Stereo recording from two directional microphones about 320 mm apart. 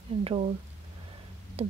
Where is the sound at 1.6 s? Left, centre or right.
Centre.